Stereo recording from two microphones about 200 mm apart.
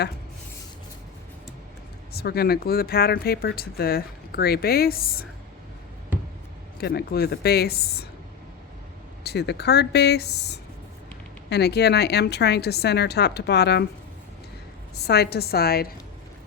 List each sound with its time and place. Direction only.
2.1 s speech: 50° left (ahead or behind)
6.7 s speech: 50° left (ahead or behind)
9.2 s a woman's voice: 55° left (ahead or behind)
15.0 s speech: 55° left (ahead or behind)